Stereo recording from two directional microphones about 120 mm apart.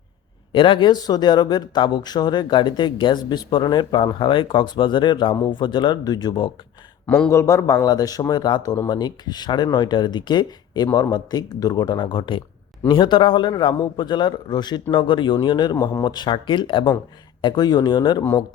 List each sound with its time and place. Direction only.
0.5 s speech: 45° left (ahead or behind)
7.0 s speech: 5° left (ahead or behind)
7.3 s speech: 25° left (ahead or behind)